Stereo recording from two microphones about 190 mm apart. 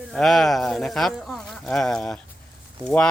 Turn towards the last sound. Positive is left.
turn(degrees=5)  # may be behind; listen again after turning